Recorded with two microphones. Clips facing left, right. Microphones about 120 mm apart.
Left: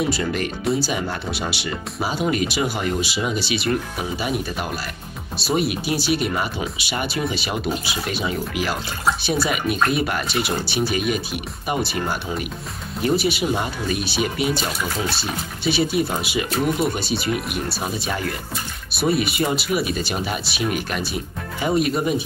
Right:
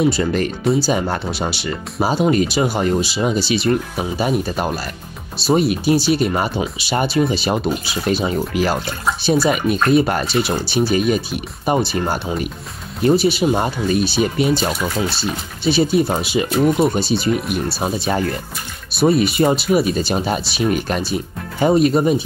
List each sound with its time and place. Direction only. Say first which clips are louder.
0.1 s speech: right 4 dB; 35° right (ahead or behind)
15.6 s speech: right 5 dB; 35° right (ahead or behind)